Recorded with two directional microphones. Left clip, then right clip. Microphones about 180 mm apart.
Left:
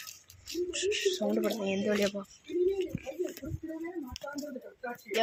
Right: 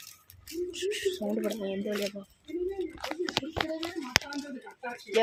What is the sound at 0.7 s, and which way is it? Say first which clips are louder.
Speech: left 1 dB; 25° right (ahead or behind).